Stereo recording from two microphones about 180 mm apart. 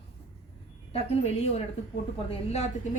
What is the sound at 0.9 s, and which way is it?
A woman's voice, 35° left (ahead or behind).